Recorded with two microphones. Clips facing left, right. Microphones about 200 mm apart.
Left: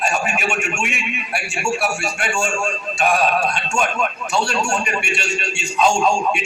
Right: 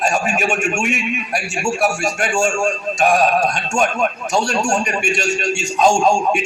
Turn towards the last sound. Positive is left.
turn(degrees=-45)  # may be behind; listen again after turning